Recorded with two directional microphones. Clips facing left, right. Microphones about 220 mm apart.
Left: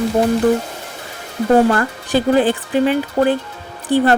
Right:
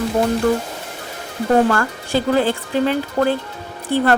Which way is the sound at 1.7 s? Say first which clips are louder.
Left 2 dB; 20° left (ahead or behind).